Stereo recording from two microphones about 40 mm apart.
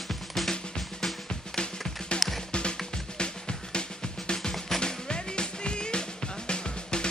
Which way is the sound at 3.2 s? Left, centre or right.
Left.